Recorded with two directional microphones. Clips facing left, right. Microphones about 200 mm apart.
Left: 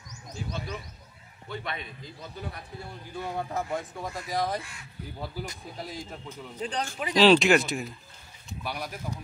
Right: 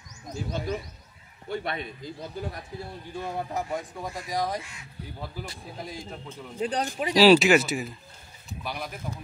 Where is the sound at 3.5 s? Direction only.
15° right (ahead or behind).